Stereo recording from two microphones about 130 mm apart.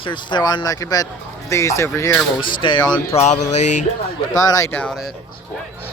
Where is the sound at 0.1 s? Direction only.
35° left (ahead or behind).